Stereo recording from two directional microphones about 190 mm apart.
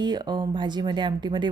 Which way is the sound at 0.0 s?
20° right (ahead or behind).